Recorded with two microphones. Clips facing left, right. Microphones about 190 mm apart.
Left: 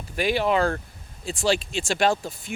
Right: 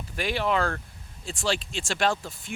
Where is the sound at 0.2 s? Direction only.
10° left (ahead or behind).